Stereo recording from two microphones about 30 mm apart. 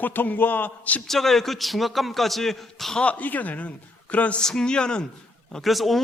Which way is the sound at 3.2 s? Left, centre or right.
Left.